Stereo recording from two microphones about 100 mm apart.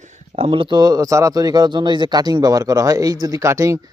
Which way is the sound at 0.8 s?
40° right (ahead or behind).